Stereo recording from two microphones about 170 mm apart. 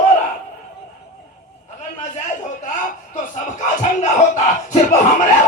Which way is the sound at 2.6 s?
50° left (ahead or behind).